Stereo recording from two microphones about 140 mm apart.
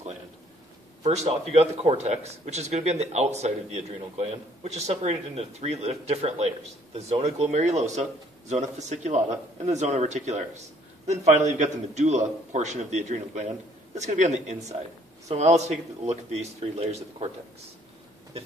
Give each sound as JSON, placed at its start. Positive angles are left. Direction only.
{"t": 1.0, "sound": "a man's voice", "side_deg": -50}